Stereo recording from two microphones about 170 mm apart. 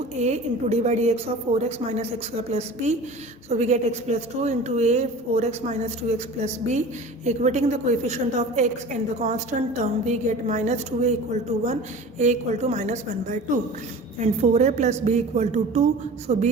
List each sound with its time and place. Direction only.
0.2 s a woman's voice: 40° right (ahead or behind)